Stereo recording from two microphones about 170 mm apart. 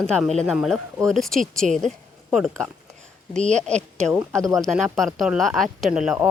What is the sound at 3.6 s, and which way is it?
A woman's voice, 5° left (ahead or behind).